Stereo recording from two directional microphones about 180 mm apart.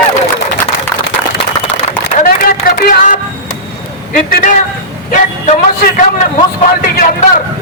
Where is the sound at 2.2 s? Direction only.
50° left (ahead or behind).